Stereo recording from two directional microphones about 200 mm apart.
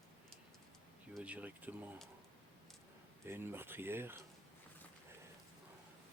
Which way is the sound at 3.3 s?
10° right (ahead or behind).